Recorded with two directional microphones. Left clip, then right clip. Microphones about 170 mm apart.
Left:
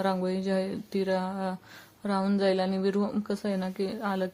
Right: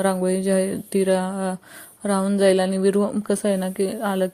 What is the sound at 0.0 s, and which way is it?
A woman's voice, 30° right (ahead or behind).